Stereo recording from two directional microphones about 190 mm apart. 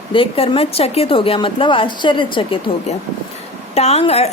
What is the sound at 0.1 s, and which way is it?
A woman's voice, 30° left (ahead or behind).